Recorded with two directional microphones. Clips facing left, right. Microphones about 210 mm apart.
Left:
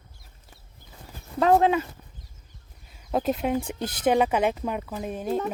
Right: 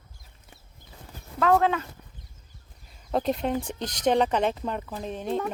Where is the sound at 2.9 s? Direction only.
5° left (ahead or behind).